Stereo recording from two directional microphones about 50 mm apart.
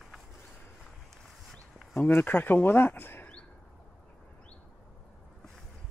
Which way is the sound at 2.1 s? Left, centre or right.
Left.